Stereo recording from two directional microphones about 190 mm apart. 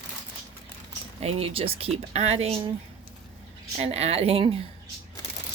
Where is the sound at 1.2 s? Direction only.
30° right (ahead or behind).